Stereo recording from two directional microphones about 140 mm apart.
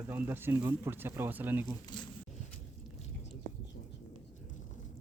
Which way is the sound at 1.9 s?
30° left (ahead or behind).